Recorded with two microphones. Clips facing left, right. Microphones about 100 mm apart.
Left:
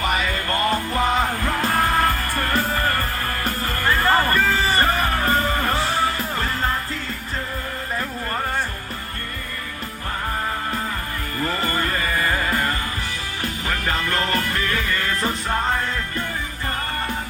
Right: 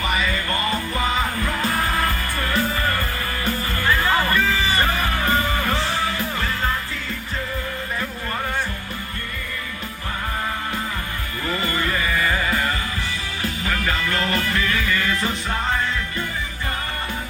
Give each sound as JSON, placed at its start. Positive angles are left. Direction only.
{"t": 0.0, "sound": "music", "side_deg": 50}
{"t": 11.4, "sound": "music", "side_deg": 45}